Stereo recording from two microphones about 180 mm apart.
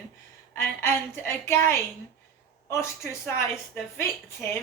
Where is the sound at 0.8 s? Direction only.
15° left (ahead or behind).